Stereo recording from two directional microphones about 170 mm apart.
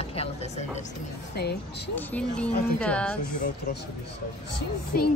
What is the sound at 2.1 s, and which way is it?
Speech, 5° left (ahead or behind).